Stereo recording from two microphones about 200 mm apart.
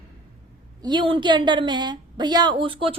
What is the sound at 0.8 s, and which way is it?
A woman's voice, 20° right (ahead or behind).